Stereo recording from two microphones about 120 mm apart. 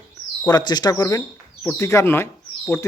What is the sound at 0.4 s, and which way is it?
Speech, 35° left (ahead or behind).